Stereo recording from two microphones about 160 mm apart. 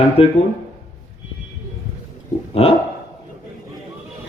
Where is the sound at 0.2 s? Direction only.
35° left (ahead or behind).